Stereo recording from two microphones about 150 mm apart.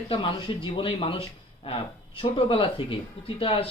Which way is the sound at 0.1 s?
35° left (ahead or behind).